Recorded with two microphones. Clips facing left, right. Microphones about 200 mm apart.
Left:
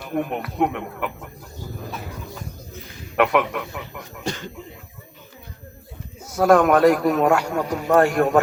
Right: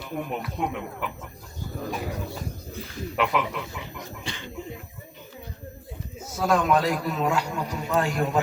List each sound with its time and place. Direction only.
0.0 s a man's voice: 60° left (ahead or behind)
3.2 s a man's voice: 60° left (ahead or behind)
4.2 s speech: 45° left (ahead or behind)
6.3 s a man's voice: 60° left (ahead or behind)